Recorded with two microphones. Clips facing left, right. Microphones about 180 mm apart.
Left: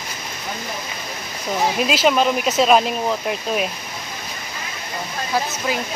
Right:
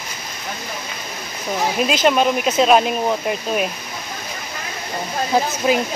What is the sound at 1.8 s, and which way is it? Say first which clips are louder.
Speech: right 2 dB; centre (ahead or behind).